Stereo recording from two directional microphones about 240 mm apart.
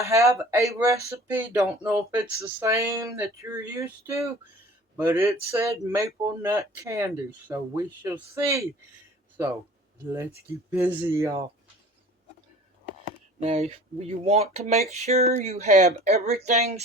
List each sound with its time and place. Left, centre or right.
0.0 s speech: centre
10.7 s speech: centre
13.4 s speech: right